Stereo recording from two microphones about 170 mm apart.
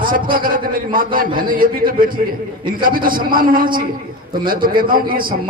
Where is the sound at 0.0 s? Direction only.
55° right (ahead or behind).